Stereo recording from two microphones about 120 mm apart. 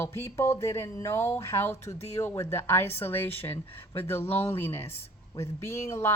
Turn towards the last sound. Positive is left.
turn(degrees=25)  # may be behind; listen again after turning